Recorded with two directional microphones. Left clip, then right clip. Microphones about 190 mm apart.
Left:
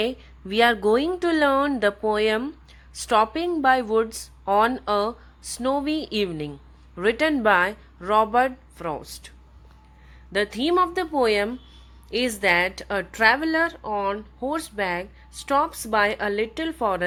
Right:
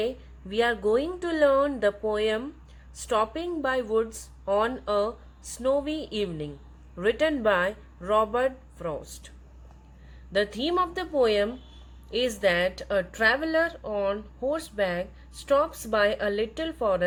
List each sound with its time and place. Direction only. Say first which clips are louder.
0.0 s speech: left 3 dB; 35° left (ahead or behind)
10.3 s speech: left 4 dB; 25° left (ahead or behind)